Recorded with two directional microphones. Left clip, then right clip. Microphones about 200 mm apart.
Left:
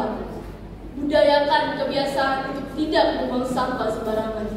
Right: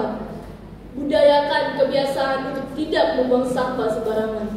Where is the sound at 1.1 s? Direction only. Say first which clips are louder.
Right 1 dB; 30° right (ahead or behind).